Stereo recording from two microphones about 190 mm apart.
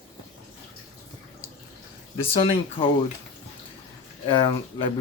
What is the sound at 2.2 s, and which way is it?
Speech, 30° left (ahead or behind).